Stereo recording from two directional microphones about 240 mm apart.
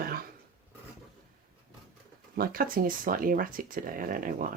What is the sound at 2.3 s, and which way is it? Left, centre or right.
Speech, right.